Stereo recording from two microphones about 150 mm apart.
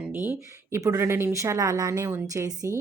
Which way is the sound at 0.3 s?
15° right (ahead or behind).